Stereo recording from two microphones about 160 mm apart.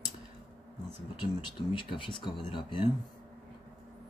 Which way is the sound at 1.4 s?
30° left (ahead or behind).